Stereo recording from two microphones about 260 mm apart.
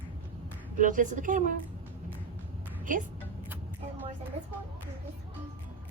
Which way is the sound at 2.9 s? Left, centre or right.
Right.